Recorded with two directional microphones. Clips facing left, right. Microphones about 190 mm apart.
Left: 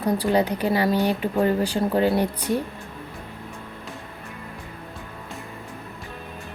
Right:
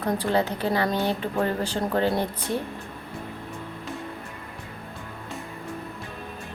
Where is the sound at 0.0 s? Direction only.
15° left (ahead or behind).